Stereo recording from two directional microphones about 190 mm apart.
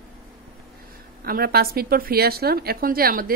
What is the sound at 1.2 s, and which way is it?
A woman's voice, 55° right (ahead or behind).